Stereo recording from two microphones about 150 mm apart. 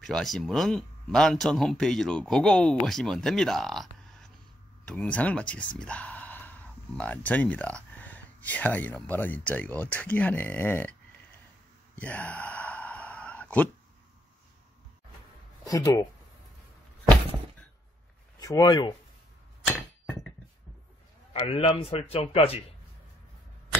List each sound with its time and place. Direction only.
0.0 s speech: centre (ahead or behind)
11.9 s sigh: 10° left (ahead or behind)
15.6 s speech: 25° left (ahead or behind)
18.4 s speech: 25° left (ahead or behind)
21.3 s a man's voice: 40° left (ahead or behind)